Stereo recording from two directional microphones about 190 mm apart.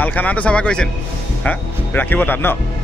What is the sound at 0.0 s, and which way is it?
Speech, 10° left (ahead or behind).